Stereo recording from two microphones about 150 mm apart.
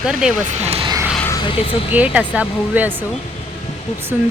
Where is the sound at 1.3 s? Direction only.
35° left (ahead or behind).